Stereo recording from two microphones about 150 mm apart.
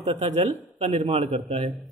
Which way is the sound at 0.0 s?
50° right (ahead or behind).